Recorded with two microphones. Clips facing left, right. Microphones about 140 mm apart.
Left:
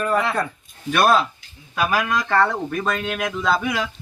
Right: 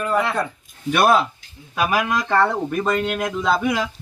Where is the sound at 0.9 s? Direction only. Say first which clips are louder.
Right 1 dB; 15° right (ahead or behind).